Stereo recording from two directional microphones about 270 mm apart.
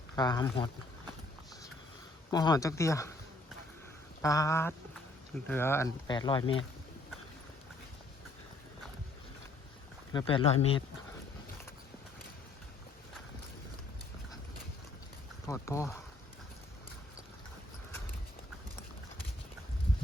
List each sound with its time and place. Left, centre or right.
0.2 s speech: centre
2.3 s speech: centre
4.2 s speech: centre
6.4 s speech: left
10.1 s speech: centre
15.4 s speech: centre